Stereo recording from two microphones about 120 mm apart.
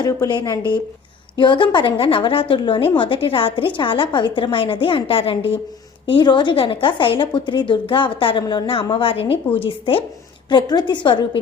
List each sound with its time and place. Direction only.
0.3 s a woman's voice: 35° left (ahead or behind)
10.5 s a woman's voice: 40° left (ahead or behind)